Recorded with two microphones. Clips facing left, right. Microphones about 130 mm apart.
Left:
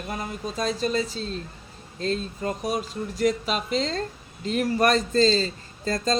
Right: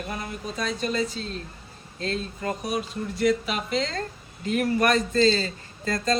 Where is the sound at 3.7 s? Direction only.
35° left (ahead or behind).